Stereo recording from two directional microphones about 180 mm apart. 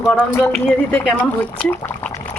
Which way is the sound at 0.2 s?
5° left (ahead or behind).